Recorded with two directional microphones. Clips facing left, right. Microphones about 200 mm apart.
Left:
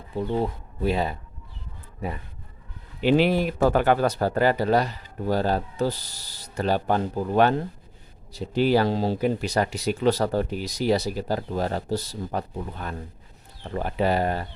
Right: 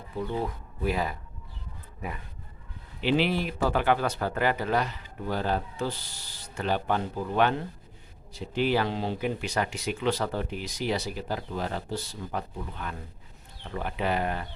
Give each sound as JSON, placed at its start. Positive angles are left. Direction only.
{"t": 0.2, "sound": "speech", "side_deg": 30}
{"t": 3.0, "sound": "speech", "side_deg": 45}